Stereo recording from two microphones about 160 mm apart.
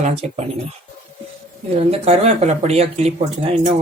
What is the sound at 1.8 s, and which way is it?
Speech, 40° right (ahead or behind).